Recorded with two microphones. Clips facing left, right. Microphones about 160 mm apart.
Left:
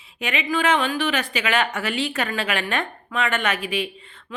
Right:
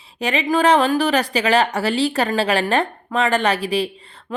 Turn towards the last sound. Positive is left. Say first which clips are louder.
# right 5 dB
turn(degrees=-35)  # may be behind; listen again after turning